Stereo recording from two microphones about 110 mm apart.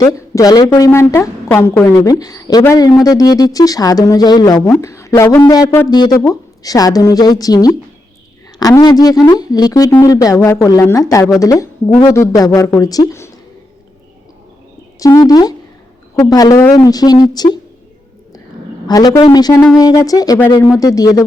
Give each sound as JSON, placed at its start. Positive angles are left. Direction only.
{"t": 0.0, "sound": "speech", "side_deg": 35}
{"t": 0.9, "sound": "a woman's voice", "side_deg": 20}
{"t": 5.4, "sound": "a woman's voice", "side_deg": 35}
{"t": 14.9, "sound": "speech", "side_deg": 30}
{"t": 18.9, "sound": "speech", "side_deg": 35}